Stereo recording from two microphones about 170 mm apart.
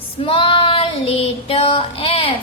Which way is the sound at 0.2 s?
35° left (ahead or behind).